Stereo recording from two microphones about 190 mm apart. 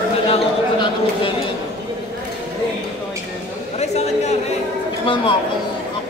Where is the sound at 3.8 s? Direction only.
35° left (ahead or behind).